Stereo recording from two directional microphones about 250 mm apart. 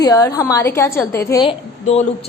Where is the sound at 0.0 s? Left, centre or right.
Centre.